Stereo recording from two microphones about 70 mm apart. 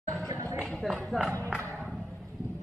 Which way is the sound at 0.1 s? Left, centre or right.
Right.